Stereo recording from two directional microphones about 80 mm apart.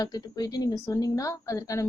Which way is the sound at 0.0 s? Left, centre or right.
Left.